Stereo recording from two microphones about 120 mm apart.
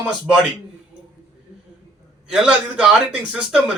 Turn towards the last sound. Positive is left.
turn(degrees=-10)  # may be behind; listen again after turning